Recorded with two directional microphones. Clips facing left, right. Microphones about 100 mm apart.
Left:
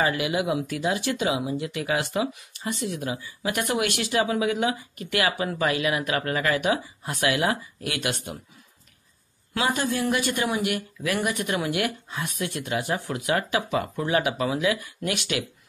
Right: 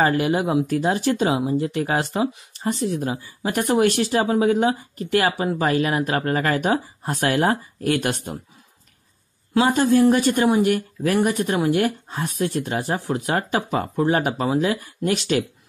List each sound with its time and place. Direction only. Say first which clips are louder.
0.0 s speech: right 5 dB; 40° right (ahead or behind)
9.5 s speech: right 8 dB; 35° right (ahead or behind)